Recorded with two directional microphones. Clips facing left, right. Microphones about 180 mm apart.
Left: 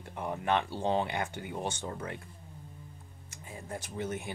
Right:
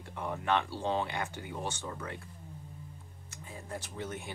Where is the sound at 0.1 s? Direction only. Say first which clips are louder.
Left 1 dB; 15° left (ahead or behind).